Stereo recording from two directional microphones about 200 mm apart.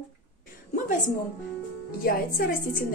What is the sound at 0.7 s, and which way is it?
A woman's voice, 40° left (ahead or behind).